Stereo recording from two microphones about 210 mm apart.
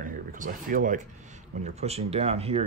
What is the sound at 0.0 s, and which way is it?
Speech, 40° right (ahead or behind).